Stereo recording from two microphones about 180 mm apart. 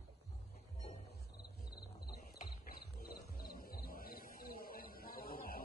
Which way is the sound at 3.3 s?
55° left (ahead or behind).